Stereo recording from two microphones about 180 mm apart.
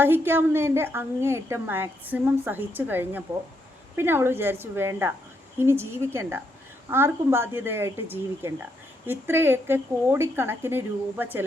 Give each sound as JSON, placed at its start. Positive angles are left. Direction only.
{"t": 0.0, "sound": "a woman's voice", "side_deg": -10}